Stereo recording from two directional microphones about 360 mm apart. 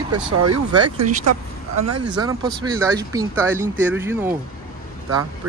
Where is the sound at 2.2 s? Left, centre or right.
Centre.